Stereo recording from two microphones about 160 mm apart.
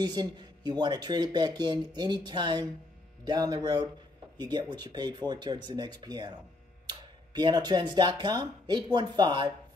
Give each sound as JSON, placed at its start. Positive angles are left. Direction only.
{"t": 0.0, "sound": "speech", "side_deg": -25}